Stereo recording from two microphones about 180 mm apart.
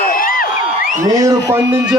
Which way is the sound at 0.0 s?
50° left (ahead or behind).